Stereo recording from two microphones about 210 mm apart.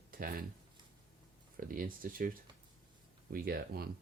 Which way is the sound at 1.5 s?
40° right (ahead or behind).